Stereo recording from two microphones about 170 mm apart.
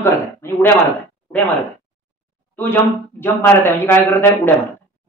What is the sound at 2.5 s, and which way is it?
Speech, 10° left (ahead or behind).